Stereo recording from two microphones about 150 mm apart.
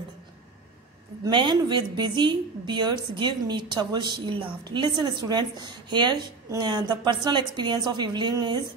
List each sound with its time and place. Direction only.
1.2 s a woman's voice: 30° right (ahead or behind)